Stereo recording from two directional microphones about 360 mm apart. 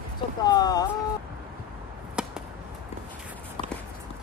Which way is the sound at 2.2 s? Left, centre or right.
Centre.